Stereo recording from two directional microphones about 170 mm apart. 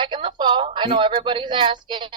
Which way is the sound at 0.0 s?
30° right (ahead or behind).